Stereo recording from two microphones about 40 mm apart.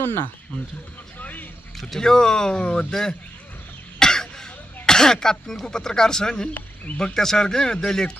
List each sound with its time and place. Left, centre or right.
0.0 s speech: left
1.2 s vehicle: left
2.0 s speech: centre
2.6 s speech: left
2.9 s speech: centre
4.0 s throat clearing: centre
5.7 s speech: centre